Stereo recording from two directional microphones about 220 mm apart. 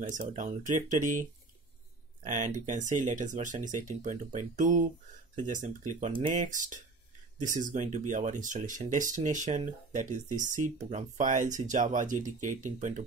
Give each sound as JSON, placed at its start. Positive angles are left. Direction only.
{"t": 0.1, "sound": "speech", "side_deg": -35}
{"t": 2.2, "sound": "speech", "side_deg": -35}